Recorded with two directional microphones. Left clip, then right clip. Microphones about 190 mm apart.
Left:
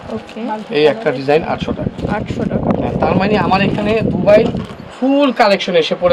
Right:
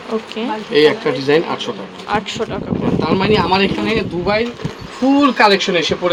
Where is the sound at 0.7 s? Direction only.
35° left (ahead or behind).